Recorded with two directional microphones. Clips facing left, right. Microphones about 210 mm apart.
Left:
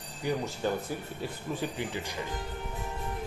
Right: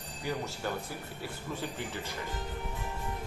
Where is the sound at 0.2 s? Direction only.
15° left (ahead or behind).